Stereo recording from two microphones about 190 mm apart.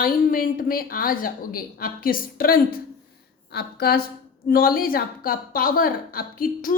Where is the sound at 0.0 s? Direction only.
50° left (ahead or behind).